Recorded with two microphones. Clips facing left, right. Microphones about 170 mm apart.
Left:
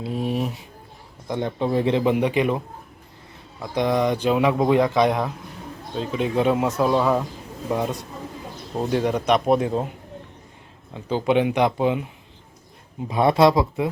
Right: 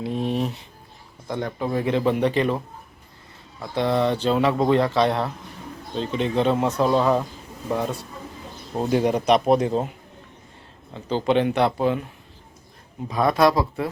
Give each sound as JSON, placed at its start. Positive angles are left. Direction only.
{"t": 0.0, "sound": "a sound", "side_deg": 5}
{"t": 1.3, "sound": "speech", "side_deg": 20}
{"t": 3.6, "sound": "speech", "side_deg": 15}
{"t": 8.7, "sound": "a man's voice", "side_deg": -5}
{"t": 10.9, "sound": "speech", "side_deg": 10}
{"t": 13.1, "sound": "speech", "side_deg": 25}